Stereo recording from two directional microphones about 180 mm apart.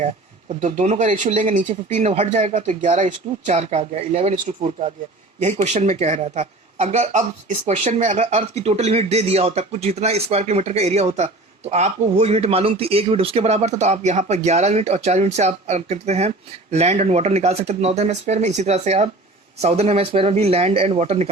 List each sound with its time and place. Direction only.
0.6 s speech: 40° right (ahead or behind)